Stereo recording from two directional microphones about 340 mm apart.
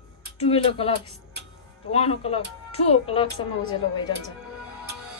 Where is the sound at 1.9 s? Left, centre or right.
Centre.